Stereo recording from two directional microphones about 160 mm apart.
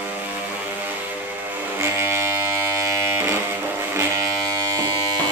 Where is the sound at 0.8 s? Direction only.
10° right (ahead or behind).